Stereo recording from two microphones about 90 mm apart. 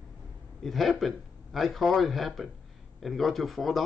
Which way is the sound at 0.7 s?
Centre (ahead or behind).